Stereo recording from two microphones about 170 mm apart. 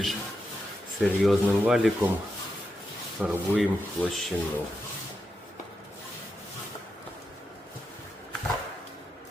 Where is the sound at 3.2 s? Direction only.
5° right (ahead or behind).